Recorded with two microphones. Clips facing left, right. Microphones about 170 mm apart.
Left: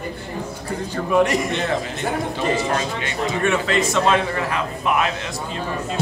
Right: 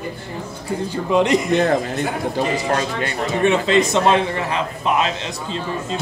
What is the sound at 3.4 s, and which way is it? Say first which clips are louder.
A man's voice: right 5 dB; 25° right (ahead or behind).